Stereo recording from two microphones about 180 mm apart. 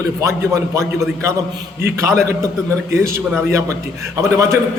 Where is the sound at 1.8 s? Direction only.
15° right (ahead or behind).